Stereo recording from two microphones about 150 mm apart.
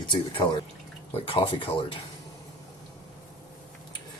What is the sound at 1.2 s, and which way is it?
Speech, 35° left (ahead or behind).